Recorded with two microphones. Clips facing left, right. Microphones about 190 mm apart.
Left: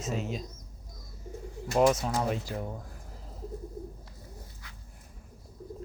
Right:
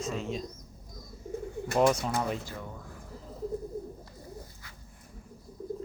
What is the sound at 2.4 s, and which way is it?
Speech, 40° left (ahead or behind).